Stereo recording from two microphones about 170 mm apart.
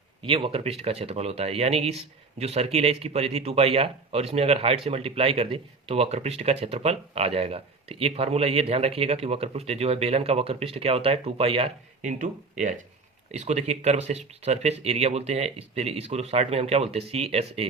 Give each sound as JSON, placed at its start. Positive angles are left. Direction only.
{"t": 0.2, "sound": "speech", "side_deg": -30}
{"t": 12.2, "sound": "speech", "side_deg": -50}